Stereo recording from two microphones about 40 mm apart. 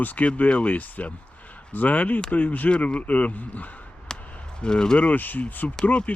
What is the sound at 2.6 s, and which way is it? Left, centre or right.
Speech, left.